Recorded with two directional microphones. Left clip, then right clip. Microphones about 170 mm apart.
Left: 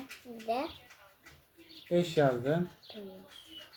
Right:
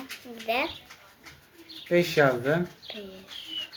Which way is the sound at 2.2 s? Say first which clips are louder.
Right 4 dB; 30° right (ahead or behind).